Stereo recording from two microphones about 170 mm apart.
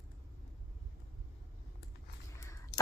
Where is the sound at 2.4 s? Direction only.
20° left (ahead or behind).